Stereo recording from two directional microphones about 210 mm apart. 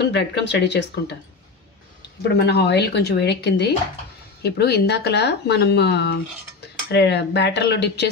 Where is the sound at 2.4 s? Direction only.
50° left (ahead or behind).